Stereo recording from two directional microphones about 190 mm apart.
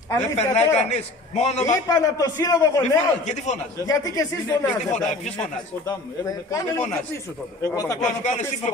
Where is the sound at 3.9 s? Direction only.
20° left (ahead or behind).